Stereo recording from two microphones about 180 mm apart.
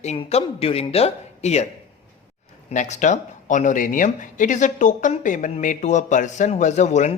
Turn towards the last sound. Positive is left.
turn(degrees=40)  # may be behind; listen again after turning